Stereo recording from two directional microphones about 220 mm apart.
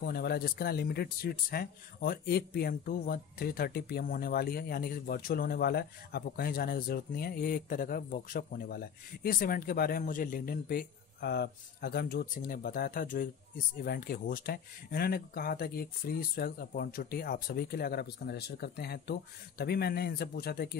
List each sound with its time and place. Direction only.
0.0 s speech: 45° left (ahead or behind)